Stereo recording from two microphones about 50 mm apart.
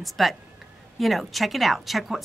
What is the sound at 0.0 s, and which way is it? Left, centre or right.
A woman's voice, centre.